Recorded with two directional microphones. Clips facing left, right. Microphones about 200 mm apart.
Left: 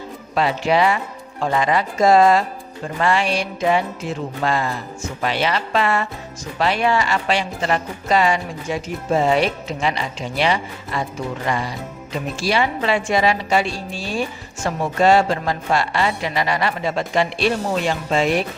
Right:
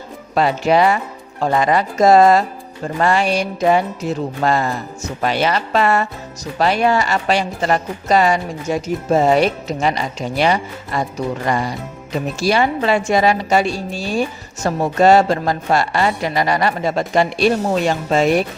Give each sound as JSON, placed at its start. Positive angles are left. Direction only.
{"t": 0.3, "sound": "a woman's voice", "side_deg": -45}
{"t": 2.8, "sound": "music", "side_deg": -40}
{"t": 11.4, "sound": "a woman's voice", "side_deg": -45}